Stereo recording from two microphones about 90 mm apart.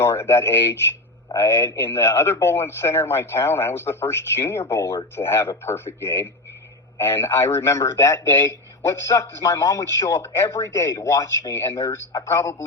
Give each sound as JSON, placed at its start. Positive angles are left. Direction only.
{"t": 0.0, "sound": "speech", "side_deg": 30}